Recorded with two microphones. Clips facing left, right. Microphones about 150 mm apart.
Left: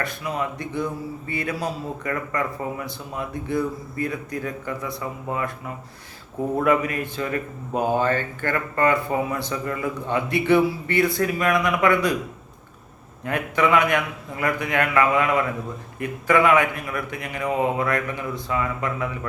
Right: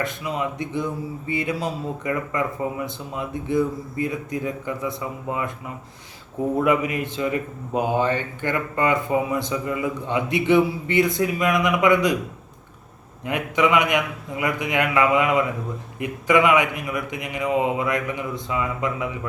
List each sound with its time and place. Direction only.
0.0 s speech: 20° right (ahead or behind)
6.7 s a man's voice: 20° right (ahead or behind)
13.2 s a man's voice: 20° right (ahead or behind)